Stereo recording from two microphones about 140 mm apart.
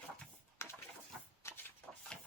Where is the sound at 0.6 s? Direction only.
20° left (ahead or behind).